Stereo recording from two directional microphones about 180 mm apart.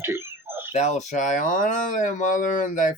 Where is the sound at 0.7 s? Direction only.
40° left (ahead or behind).